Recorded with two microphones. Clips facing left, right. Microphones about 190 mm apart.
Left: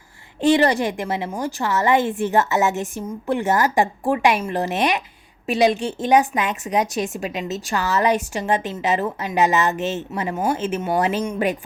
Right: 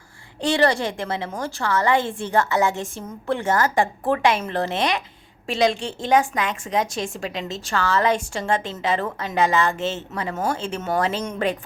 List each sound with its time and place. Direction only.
0.4 s a woman's voice: 20° left (ahead or behind)